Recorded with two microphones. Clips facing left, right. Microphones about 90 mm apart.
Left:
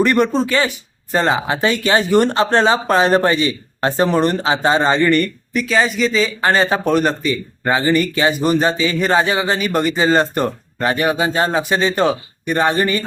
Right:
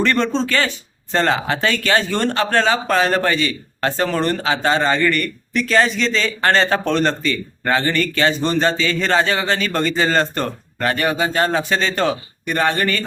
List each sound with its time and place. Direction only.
0.0 s speech: 15° left (ahead or behind)
5.5 s speech: 5° left (ahead or behind)